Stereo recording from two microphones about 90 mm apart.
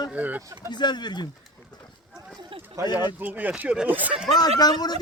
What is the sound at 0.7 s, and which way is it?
Speech, 55° left (ahead or behind).